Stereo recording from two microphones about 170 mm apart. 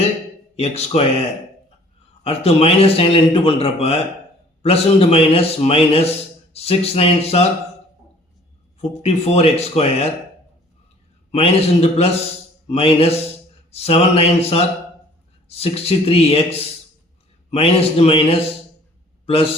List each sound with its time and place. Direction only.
0.6 s a man's voice: 35° left (ahead or behind)
2.2 s a man's voice: 35° left (ahead or behind)
9.0 s a man's voice: 40° left (ahead or behind)
11.3 s a man's voice: 35° left (ahead or behind)